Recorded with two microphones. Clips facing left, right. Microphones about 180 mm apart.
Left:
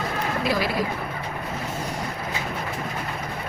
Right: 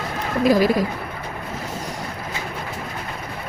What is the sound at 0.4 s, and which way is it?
Speech, 45° right (ahead or behind).